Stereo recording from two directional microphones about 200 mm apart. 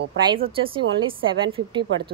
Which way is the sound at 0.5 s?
25° right (ahead or behind).